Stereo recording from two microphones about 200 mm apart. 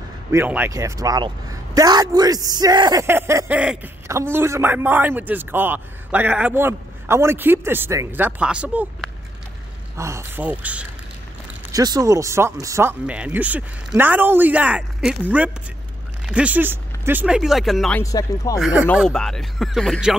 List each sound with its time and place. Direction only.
0.3 s speech: 10° right (ahead or behind)
9.9 s speech: 15° right (ahead or behind)
11.7 s speech: 20° right (ahead or behind); by 18.0 s centre (ahead or behind)
18.0 s speech: 15° left (ahead or behind)
18.6 s speech: 5° right (ahead or behind)